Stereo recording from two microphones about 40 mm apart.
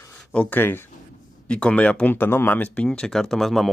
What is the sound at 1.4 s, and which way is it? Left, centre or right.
Speech, left.